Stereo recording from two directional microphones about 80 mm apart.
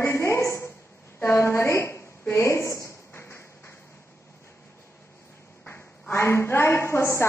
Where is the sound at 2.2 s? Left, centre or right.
Left.